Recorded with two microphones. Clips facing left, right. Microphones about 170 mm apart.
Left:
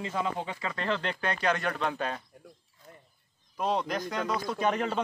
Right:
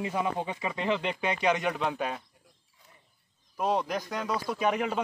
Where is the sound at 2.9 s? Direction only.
55° left (ahead or behind).